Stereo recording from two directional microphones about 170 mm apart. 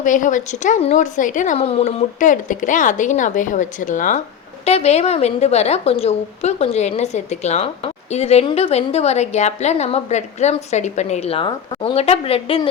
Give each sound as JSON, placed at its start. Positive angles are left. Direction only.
{"t": 0.0, "sound": "speech", "side_deg": 50}
{"t": 4.6, "sound": "a woman's voice", "side_deg": 40}